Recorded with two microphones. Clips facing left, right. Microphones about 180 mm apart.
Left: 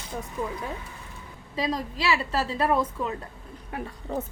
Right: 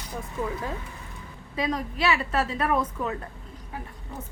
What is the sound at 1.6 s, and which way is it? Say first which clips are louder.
Speech: even; 30° left (ahead or behind).